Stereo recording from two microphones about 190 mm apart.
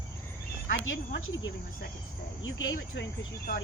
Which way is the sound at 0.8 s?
90° left.